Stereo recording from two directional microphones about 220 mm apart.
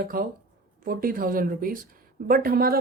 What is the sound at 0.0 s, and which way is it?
Speech, 40° right (ahead or behind).